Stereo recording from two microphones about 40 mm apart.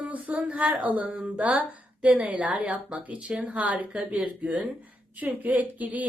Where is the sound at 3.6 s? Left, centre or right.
Right.